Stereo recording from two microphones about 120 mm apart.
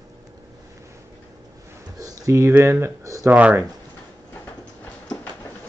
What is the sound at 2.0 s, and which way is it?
Speech, 25° right (ahead or behind).